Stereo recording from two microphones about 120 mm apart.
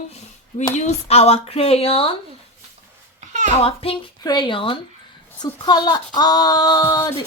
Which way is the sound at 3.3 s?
90° right.